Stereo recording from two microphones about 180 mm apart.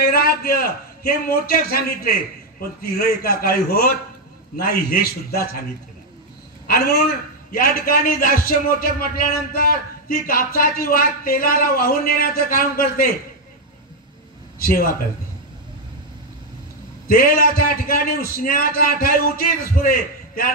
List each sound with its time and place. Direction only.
0.0 s a man's voice: 55° left (ahead or behind)
6.7 s a man's voice: 60° left (ahead or behind)
14.6 s speech: 55° left (ahead or behind)
17.1 s a man's voice: 55° left (ahead or behind)